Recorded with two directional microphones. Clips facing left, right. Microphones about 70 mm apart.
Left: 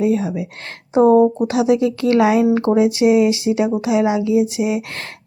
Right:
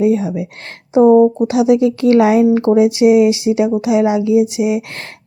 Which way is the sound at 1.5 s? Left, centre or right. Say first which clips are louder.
Right 3 dB; left.